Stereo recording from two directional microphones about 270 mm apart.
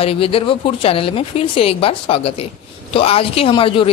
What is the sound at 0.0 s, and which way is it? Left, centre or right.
Speech, left.